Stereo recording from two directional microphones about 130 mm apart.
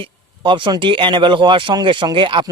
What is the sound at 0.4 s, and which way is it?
Speech, 40° right (ahead or behind).